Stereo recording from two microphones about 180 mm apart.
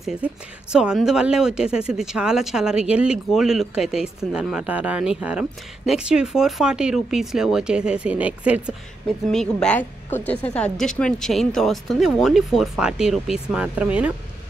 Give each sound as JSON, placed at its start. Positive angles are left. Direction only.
{"t": 0.0, "sound": "a woman's voice", "side_deg": -5}
{"t": 9.3, "sound": "a woman's voice", "side_deg": 5}